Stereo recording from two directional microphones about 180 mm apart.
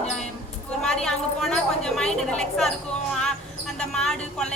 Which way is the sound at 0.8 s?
Centre (ahead or behind).